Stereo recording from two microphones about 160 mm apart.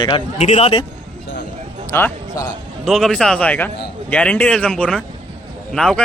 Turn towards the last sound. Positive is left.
turn(degrees=5)  # may be behind; listen again after turning